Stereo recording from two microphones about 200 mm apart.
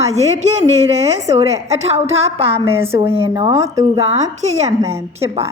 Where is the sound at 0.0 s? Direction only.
35° right (ahead or behind).